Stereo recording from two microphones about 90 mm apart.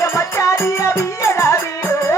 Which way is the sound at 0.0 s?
35° left (ahead or behind).